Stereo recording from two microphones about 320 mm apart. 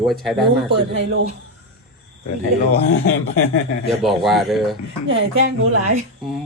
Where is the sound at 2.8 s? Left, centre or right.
Left.